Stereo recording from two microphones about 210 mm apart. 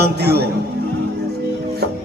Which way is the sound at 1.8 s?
50° right (ahead or behind).